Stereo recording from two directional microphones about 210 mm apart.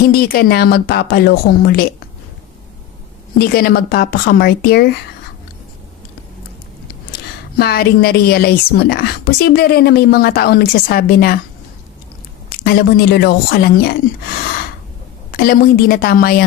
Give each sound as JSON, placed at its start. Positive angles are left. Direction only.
{"t": 0.1, "sound": "a woman's voice", "side_deg": 45}
{"t": 3.3, "sound": "a woman's voice", "side_deg": 50}
{"t": 7.6, "sound": "a woman's voice", "side_deg": 50}
{"t": 12.6, "sound": "a woman's voice", "side_deg": 50}
{"t": 15.3, "sound": "a woman's voice", "side_deg": 45}